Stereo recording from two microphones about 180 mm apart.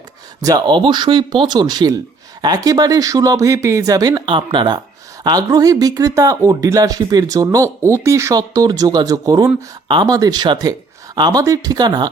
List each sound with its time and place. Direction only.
0.4 s speech: 25° right (ahead or behind)